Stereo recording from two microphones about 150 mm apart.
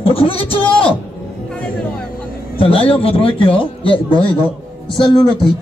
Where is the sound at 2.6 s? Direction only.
40° left (ahead or behind).